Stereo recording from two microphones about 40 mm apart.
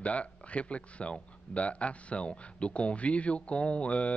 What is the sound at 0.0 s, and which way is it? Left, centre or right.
Speech, left.